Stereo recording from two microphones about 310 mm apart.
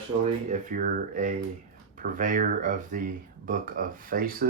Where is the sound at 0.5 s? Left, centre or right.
Right.